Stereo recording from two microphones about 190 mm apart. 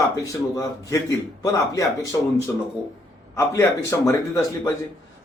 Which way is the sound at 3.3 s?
15° left (ahead or behind).